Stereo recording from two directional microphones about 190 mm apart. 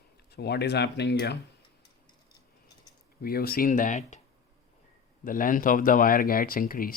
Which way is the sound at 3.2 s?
55° left (ahead or behind).